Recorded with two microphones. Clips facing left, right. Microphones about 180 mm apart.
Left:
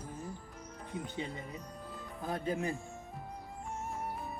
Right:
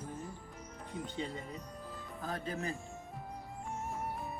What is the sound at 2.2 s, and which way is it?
Speech, 20° left (ahead or behind).